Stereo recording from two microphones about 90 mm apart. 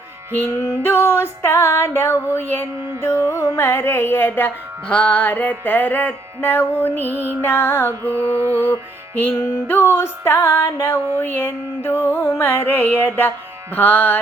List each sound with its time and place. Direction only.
0.6 s music: 30° left (ahead or behind)
8.4 s music: 25° right (ahead or behind)
9.1 s music: 25° left (ahead or behind)